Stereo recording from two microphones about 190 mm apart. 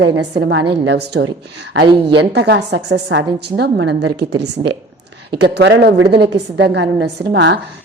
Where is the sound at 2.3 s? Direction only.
65° right (ahead or behind).